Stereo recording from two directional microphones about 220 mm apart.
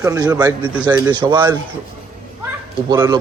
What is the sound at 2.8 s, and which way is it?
Speech, 15° right (ahead or behind).